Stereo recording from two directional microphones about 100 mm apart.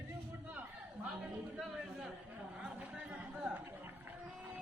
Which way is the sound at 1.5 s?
5° right (ahead or behind).